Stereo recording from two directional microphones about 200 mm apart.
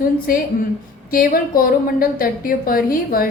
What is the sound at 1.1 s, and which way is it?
A woman's voice, 45° left (ahead or behind).